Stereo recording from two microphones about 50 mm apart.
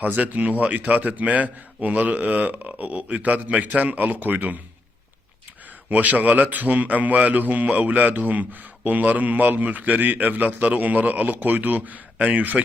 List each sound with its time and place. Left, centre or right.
0.0 s a man's voice: right
5.9 s a man's voice: right